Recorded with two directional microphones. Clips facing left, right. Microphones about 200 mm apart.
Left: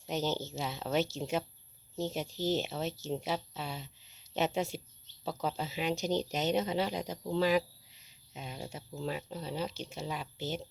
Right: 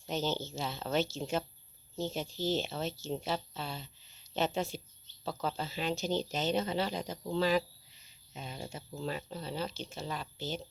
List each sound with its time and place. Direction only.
0.1 s speech: 15° left (ahead or behind)
0.8 s speech: 5° left (ahead or behind)